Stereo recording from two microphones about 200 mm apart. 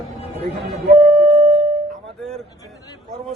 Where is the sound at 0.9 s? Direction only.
40° right (ahead or behind).